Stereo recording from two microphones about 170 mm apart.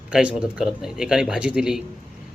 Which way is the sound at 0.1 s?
5° right (ahead or behind).